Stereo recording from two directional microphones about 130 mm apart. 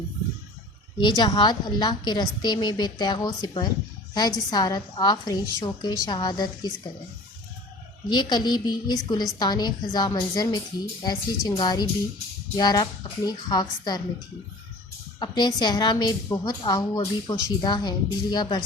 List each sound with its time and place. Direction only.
0.9 s a woman's voice: 35° left (ahead or behind)
8.1 s a woman's voice: 35° left (ahead or behind)
15.2 s a woman's voice: 35° left (ahead or behind)